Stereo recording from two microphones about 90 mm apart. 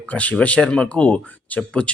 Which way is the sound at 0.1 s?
15° left (ahead or behind).